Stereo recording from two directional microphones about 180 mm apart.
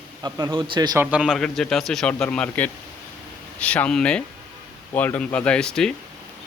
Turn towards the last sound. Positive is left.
turn(degrees=5)  # may be behind; listen again after turning